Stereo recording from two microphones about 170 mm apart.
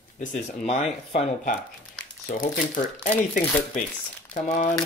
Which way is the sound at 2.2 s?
55° left (ahead or behind).